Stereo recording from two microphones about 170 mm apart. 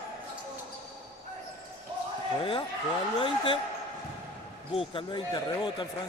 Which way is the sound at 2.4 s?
30° left (ahead or behind).